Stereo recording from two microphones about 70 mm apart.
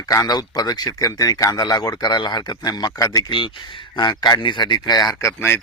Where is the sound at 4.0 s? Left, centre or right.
Left.